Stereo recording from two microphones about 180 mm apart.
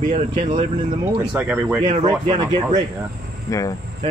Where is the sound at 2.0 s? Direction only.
20° right (ahead or behind).